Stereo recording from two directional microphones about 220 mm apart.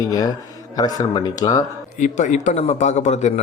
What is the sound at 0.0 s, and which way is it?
Speech, 15° left (ahead or behind).